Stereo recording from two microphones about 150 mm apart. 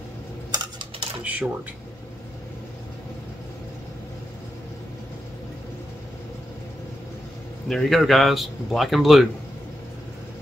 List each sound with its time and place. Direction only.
0.5 s typing: 30° right (ahead or behind)
1.2 s speech: 10° right (ahead or behind)
7.6 s speech: centre (ahead or behind)